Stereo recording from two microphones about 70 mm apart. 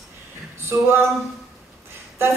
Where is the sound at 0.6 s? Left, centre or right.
Right.